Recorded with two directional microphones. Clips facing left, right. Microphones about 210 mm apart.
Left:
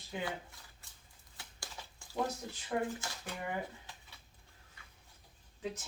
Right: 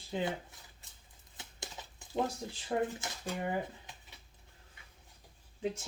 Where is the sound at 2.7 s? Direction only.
30° right (ahead or behind).